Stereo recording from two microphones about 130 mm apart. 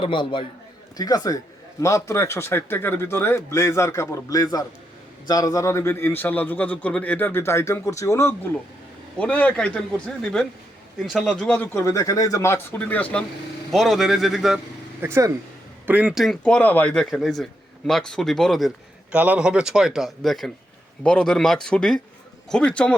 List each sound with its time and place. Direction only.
0.0 s a man's voice: 40° left (ahead or behind)
0.9 s a man's voice: 30° left (ahead or behind)
9.1 s a man's voice: 10° left (ahead or behind)
13.7 s a man's voice: centre (ahead or behind)
15.0 s speech: 20° right (ahead or behind)
15.9 s a man's voice: 10° right (ahead or behind)
19.1 s a man's voice: 10° right (ahead or behind); by 23.0 s 10° left (ahead or behind)